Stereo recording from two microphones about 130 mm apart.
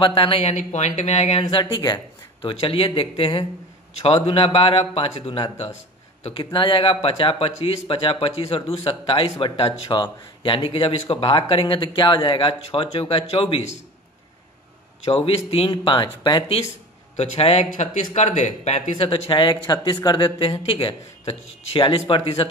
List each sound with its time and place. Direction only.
0.0 s speech: 40° left (ahead or behind); by 1.4 s 60° left (ahead or behind)
1.4 s speech: 35° left (ahead or behind)
15.0 s speech: 50° left (ahead or behind)
17.2 s speech: 55° left (ahead or behind)